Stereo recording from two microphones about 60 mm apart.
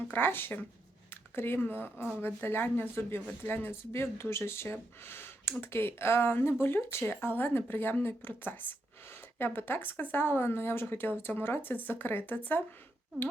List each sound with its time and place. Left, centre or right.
0.1 s speech: left